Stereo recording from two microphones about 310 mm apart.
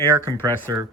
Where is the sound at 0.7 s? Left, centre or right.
Centre.